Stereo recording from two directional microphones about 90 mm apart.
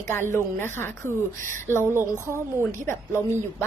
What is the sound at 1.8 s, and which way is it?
Speech, 25° right (ahead or behind).